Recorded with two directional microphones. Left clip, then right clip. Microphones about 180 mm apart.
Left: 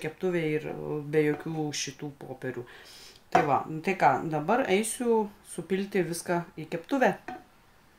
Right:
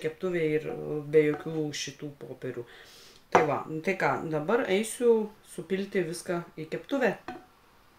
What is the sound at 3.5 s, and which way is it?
Speech, 45° left (ahead or behind).